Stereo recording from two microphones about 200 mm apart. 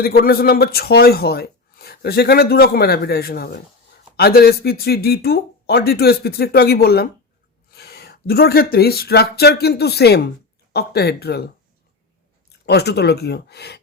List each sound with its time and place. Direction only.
0.0 s speech: 50° left (ahead or behind)
12.5 s speech: 55° left (ahead or behind)